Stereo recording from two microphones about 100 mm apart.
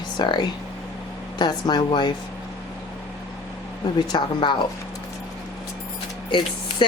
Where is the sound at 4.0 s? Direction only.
50° left (ahead or behind).